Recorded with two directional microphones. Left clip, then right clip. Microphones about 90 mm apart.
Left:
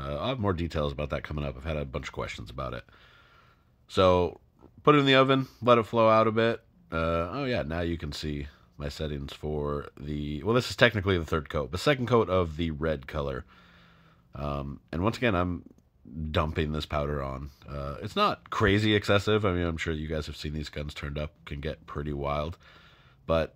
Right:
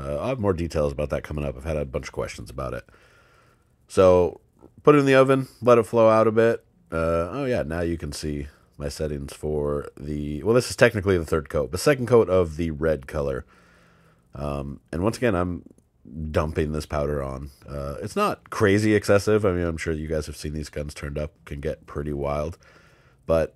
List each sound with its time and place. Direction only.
0.0 s a sound: 30° right (ahead or behind)
0.6 s speech: 45° right (ahead or behind)
3.9 s speech: 30° right (ahead or behind)
11.7 s speech: 40° right (ahead or behind)
12.0 s speech: 25° right (ahead or behind)
16.5 s speech: 35° right (ahead or behind)